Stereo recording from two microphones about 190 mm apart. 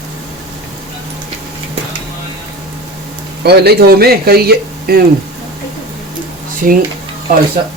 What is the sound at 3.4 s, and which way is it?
Speech, 60° right (ahead or behind).